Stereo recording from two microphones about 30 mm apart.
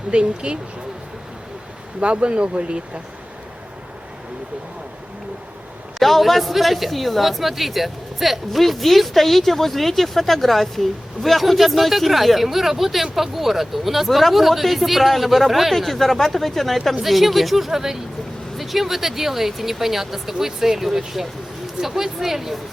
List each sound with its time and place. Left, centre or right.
0.1 s speech: right
2.0 s speech: right
6.0 s speech: centre